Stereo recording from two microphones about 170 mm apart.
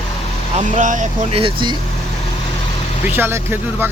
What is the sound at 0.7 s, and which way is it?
Speech, 50° right (ahead or behind).